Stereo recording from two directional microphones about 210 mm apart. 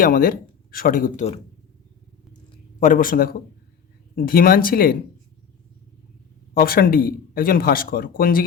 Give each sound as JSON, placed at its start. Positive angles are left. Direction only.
{"t": 0.0, "sound": "speech", "side_deg": 40}
{"t": 2.8, "sound": "speech", "side_deg": 40}
{"t": 6.5, "sound": "speech", "side_deg": 45}